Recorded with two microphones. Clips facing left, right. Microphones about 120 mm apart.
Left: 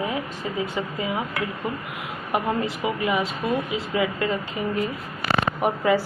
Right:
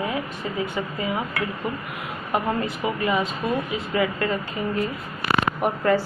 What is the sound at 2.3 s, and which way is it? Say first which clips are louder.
Speech: even; 15° left (ahead or behind).